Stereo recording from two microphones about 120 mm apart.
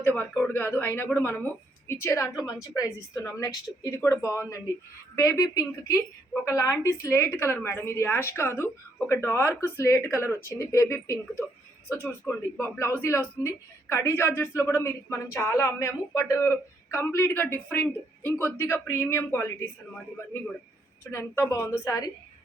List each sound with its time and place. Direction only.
0.0 s a woman's voice: 15° left (ahead or behind)
21.1 s a woman's voice: 20° left (ahead or behind)